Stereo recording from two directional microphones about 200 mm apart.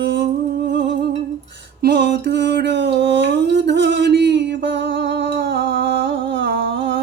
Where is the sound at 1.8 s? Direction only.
60° right (ahead or behind).